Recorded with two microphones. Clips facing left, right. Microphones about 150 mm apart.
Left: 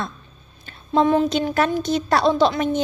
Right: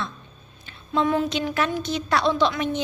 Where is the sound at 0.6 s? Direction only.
45° left (ahead or behind).